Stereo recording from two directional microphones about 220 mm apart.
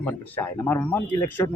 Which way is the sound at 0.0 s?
5° left (ahead or behind).